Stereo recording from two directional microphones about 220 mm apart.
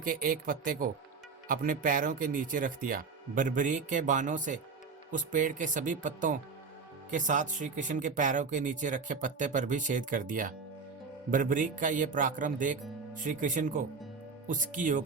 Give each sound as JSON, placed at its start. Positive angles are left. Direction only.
{"t": 0.0, "sound": "speech", "side_deg": -40}